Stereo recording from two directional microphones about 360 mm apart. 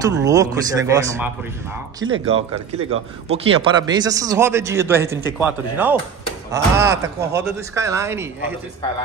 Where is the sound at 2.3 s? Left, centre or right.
Centre.